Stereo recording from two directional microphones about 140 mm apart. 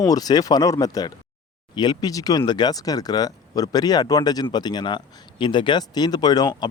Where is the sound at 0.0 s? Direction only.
25° left (ahead or behind).